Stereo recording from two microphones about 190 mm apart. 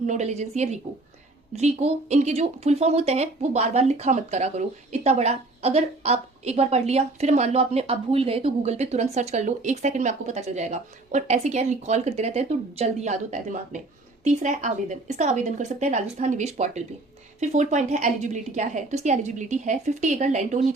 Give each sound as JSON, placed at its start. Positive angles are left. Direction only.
{"t": 0.0, "sound": "speech", "side_deg": -35}